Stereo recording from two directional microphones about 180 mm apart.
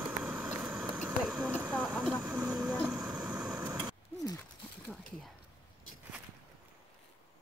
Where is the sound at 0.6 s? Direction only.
5° right (ahead or behind).